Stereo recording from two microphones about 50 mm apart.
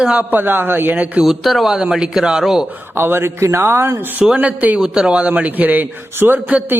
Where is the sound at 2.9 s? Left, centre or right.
Right.